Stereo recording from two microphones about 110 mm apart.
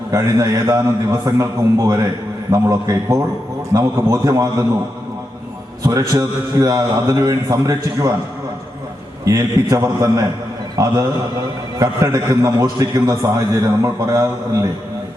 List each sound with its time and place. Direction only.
0.1 s a man's voice: 30° right (ahead or behind)
5.8 s a man's voice: 30° right (ahead or behind)
9.2 s a man's voice: 30° right (ahead or behind)